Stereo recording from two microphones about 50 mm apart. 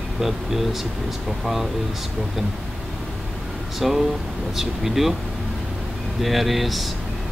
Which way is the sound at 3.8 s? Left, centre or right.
Centre.